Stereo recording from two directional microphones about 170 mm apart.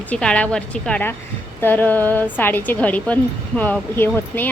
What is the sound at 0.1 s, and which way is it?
A woman's voice, 5° left (ahead or behind).